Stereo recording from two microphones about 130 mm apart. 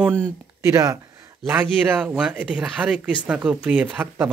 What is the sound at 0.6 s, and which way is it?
Speech, 20° right (ahead or behind).